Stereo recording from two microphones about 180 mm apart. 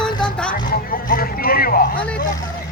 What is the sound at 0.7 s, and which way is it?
Speech, 50° left (ahead or behind).